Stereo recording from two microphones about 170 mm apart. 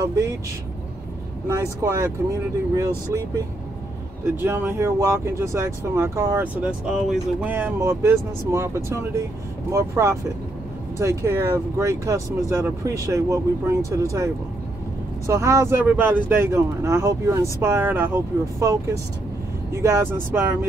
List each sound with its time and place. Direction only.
0.0 s speech: 20° right (ahead or behind)
1.5 s speech: 15° right (ahead or behind)
4.4 s speech: 15° right (ahead or behind)